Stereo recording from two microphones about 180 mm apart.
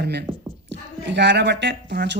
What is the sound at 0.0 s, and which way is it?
Speech, 65° right (ahead or behind).